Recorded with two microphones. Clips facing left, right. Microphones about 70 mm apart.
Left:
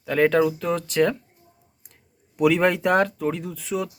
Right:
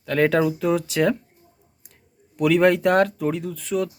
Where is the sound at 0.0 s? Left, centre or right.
Centre.